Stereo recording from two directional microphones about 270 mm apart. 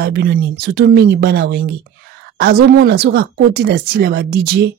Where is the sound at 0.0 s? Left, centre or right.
Right.